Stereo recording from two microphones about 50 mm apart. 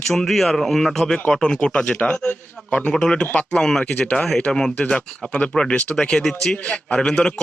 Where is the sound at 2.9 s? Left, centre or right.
Centre.